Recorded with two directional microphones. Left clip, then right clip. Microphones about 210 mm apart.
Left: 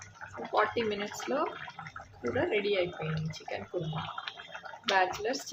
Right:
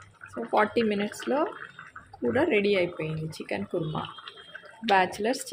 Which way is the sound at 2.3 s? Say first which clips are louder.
Right 6 dB; 35° right (ahead or behind).